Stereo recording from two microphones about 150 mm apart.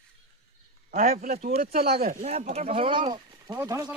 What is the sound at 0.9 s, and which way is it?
Speech, 70° right (ahead or behind).